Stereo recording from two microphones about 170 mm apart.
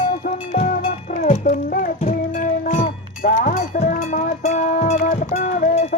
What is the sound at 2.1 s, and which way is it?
Music, 55° left (ahead or behind).